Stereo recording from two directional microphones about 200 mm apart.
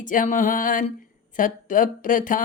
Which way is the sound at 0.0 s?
40° left (ahead or behind).